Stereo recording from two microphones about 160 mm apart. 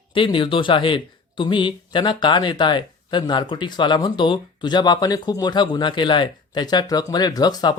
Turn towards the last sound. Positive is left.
turn(degrees=25)  # may be behind; listen again after turning